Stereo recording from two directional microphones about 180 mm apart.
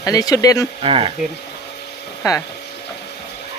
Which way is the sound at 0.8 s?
30° right (ahead or behind).